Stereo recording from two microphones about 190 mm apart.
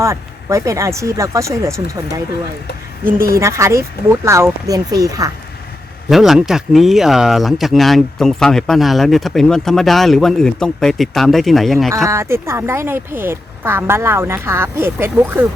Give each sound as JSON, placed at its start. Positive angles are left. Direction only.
{"t": 0.0, "sound": "speech", "side_deg": -15}
{"t": 3.3, "sound": "speech", "side_deg": -15}
{"t": 6.1, "sound": "speech", "side_deg": 0}
{"t": 12.0, "sound": "speech", "side_deg": -15}